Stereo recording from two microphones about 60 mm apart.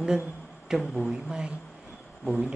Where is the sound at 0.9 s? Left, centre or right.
Centre.